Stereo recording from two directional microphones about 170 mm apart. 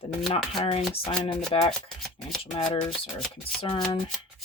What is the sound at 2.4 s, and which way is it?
Speech, 35° left (ahead or behind).